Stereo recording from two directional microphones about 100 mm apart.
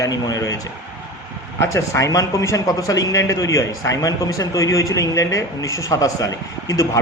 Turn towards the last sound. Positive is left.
turn(degrees=35)  # may be behind; listen again after turning